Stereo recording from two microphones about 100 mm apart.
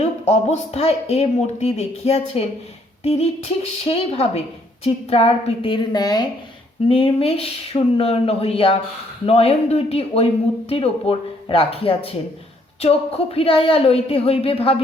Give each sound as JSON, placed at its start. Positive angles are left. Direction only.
{"t": 0.0, "sound": "speech", "side_deg": 90}
{"t": 3.0, "sound": "a sound", "side_deg": 90}
{"t": 3.8, "sound": "a woman's voice", "side_deg": 80}
{"t": 5.7, "sound": "a woman's voice", "side_deg": 45}
{"t": 6.8, "sound": "a woman's voice", "side_deg": 65}